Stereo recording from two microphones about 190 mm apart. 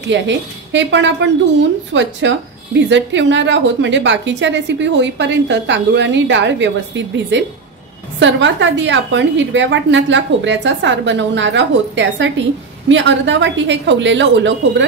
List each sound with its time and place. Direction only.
0.1 s a woman's voice: 70° right (ahead or behind)